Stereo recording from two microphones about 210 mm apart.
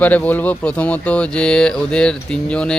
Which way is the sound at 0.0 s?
10° left (ahead or behind).